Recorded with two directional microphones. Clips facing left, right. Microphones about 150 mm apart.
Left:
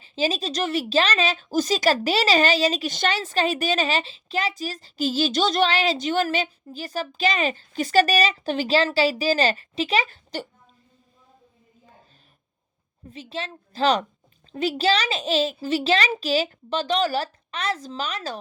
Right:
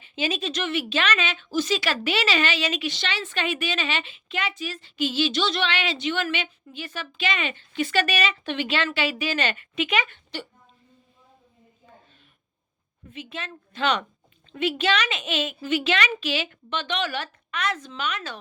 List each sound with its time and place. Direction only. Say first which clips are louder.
0.0 s a woman's voice: left 3 dB; 35° left (ahead or behind)
13.1 s a woman's voice: left 3 dB; 35° left (ahead or behind)